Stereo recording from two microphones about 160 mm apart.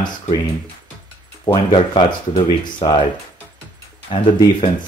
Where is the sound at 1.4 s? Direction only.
30° left (ahead or behind).